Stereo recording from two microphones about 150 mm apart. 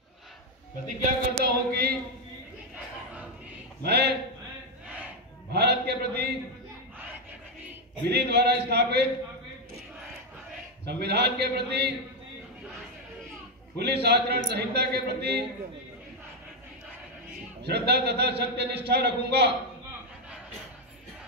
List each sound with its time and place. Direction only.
1.3 s a man's voice: 90° right
3.8 s a sound: 90° right
5.5 s a sound: 90° right
8.1 s a man's voice: 90° right
10.9 s a man's voice: 90° right
13.7 s a man's voice: 90° right
17.6 s a man's voice: 90° right